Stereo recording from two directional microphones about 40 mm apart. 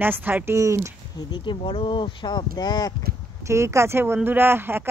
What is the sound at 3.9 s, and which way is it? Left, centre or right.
Speech, right.